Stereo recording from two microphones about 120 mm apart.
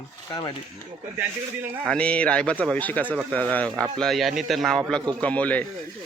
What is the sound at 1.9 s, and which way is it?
Speech, 10° left (ahead or behind).